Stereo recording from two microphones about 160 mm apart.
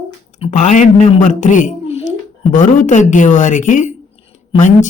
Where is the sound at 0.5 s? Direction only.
50° left (ahead or behind).